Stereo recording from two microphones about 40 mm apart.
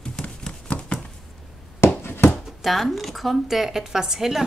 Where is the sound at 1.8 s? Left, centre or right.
Left.